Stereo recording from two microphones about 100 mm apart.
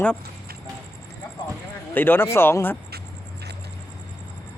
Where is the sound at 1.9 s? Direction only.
20° left (ahead or behind).